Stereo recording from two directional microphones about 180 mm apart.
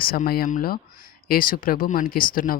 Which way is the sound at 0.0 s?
55° left (ahead or behind).